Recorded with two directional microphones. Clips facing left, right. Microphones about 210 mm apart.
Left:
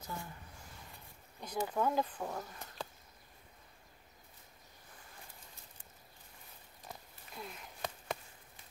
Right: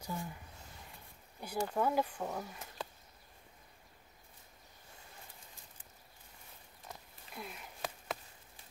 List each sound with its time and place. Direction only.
0.0 s speech: 15° right (ahead or behind)
1.6 s speech: 5° left (ahead or behind)
1.9 s speech: 10° right (ahead or behind)
6.9 s a sound: 5° right (ahead or behind)